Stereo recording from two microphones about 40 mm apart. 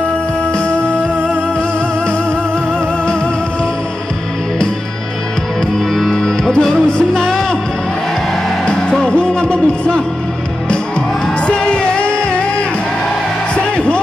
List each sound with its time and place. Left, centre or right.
5.9 s music: centre
8.6 s music: left
11.4 s music: left